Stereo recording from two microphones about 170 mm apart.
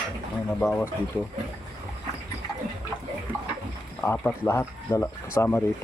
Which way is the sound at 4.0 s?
10° left (ahead or behind).